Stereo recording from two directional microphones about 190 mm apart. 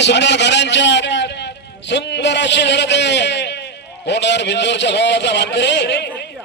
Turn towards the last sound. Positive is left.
turn(degrees=65)  # may be behind; listen again after turning